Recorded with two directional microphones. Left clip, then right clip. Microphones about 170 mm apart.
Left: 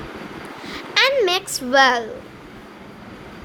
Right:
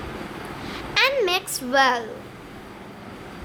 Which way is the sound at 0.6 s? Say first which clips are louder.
Left 3 dB; 15° left (ahead or behind).